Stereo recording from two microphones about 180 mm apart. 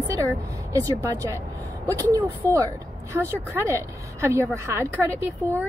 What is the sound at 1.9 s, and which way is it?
A woman's voice, 20° right (ahead or behind).